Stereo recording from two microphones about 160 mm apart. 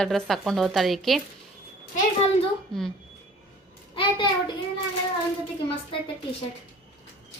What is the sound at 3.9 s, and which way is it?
Speech, 30° left (ahead or behind).